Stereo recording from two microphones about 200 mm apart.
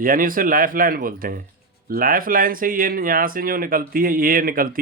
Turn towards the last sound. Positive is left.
turn(degrees=-45)  # may be behind; listen again after turning